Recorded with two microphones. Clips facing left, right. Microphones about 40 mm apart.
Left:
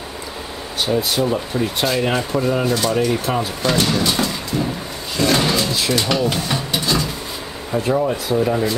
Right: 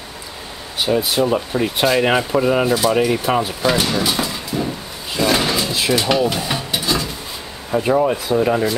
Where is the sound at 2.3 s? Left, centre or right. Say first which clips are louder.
Right 3 dB; centre.